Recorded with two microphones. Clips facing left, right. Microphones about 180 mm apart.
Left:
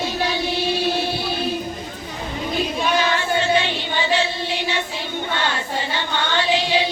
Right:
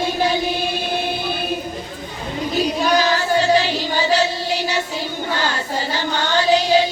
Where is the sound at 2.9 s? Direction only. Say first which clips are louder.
Right 2 dB; 40° right (ahead or behind).